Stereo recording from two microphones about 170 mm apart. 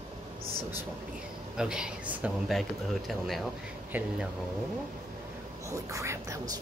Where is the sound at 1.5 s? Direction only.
5° right (ahead or behind).